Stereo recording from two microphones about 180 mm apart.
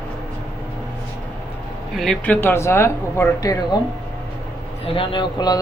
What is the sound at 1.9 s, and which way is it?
Speech, centre (ahead or behind).